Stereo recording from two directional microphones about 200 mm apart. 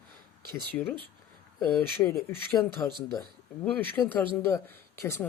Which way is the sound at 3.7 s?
10° left (ahead or behind).